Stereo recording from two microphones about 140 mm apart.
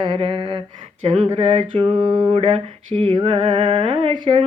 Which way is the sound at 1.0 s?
50° right (ahead or behind).